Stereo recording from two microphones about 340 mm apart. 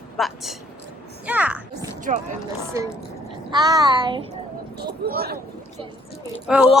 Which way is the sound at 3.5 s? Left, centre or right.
Centre.